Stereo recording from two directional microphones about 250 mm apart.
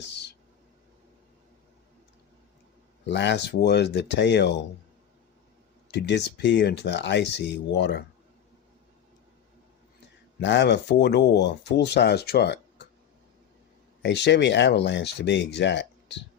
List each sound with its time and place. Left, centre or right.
3.1 s speech: left
5.9 s speech: left
10.4 s speech: left
14.0 s speech: left